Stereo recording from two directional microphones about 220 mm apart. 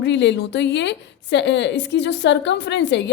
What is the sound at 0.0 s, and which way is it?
A woman's voice, 55° left (ahead or behind).